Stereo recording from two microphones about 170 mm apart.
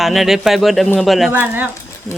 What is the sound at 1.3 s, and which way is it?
Speech, 10° right (ahead or behind).